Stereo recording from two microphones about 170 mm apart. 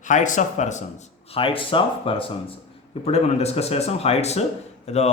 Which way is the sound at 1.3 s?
35° left (ahead or behind).